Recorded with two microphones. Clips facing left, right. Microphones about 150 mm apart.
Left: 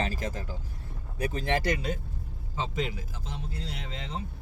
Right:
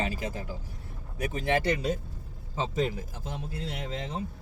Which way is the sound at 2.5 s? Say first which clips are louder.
Right 3 dB; 45° right (ahead or behind).